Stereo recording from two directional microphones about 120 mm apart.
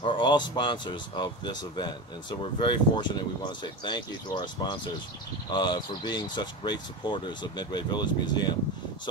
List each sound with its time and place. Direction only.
0.0 s speech: 40° left (ahead or behind)